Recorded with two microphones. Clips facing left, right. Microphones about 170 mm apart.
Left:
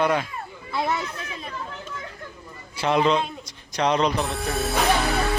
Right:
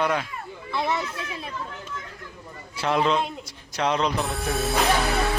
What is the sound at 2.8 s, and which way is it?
Music, centre (ahead or behind).